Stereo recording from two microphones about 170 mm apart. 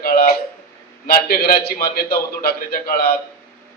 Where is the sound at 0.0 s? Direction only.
60° left (ahead or behind).